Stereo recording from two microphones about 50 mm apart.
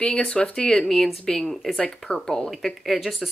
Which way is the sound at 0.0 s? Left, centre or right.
Centre.